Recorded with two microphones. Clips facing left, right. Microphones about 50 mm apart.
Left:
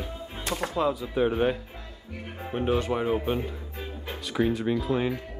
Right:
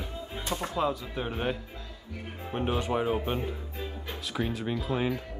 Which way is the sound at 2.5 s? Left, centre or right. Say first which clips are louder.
Left 3 dB; centre.